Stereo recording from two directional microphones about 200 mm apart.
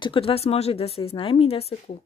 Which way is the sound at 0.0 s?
25° left (ahead or behind).